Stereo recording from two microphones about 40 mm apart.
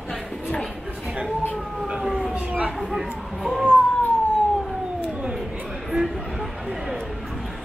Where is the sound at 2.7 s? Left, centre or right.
Centre.